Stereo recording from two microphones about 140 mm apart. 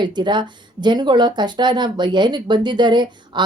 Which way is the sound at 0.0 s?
30° right (ahead or behind).